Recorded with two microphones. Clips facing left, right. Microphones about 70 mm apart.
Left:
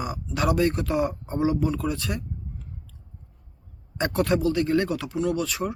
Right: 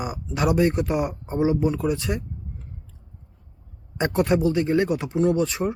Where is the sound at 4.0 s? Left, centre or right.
Right.